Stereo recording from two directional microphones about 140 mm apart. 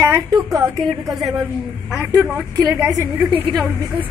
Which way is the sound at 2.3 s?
5° right (ahead or behind).